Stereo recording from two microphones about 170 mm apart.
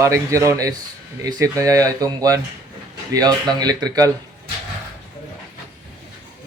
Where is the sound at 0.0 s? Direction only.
15° right (ahead or behind).